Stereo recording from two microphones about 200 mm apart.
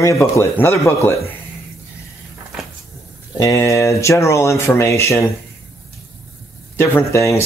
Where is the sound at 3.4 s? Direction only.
15° left (ahead or behind).